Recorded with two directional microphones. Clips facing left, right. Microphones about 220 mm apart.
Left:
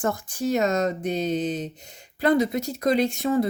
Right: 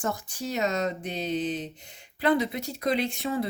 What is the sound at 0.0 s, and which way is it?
Speech, 55° left (ahead or behind).